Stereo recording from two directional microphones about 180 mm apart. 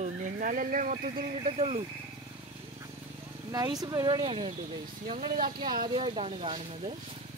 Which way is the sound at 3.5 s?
20° right (ahead or behind).